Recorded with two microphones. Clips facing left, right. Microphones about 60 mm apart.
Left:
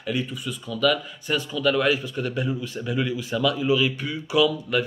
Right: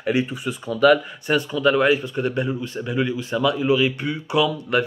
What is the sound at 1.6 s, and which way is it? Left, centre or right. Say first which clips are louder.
Speech: right 3 dB; right.